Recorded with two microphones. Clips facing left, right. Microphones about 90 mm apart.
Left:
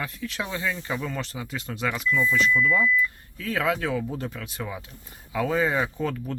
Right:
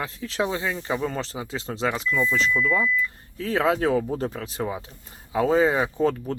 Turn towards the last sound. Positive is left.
turn(degrees=-35)  # may be behind; listen again after turning